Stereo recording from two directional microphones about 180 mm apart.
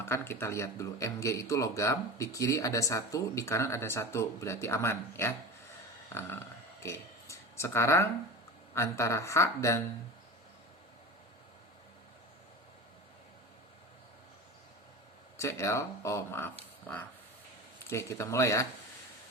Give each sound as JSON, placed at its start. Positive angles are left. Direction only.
{"t": 0.0, "sound": "speech", "side_deg": 15}
{"t": 15.4, "sound": "speech", "side_deg": 15}
{"t": 17.8, "sound": "speech", "side_deg": 15}